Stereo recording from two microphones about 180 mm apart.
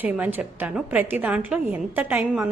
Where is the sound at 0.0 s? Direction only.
10° right (ahead or behind).